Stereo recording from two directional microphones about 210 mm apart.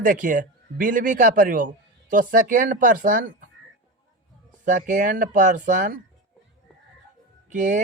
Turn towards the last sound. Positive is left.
turn(degrees=-35)  # may be behind; listen again after turning